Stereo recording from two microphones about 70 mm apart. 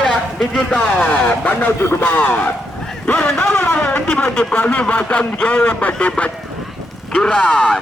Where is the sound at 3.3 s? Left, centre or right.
Left; by 7.8 s centre.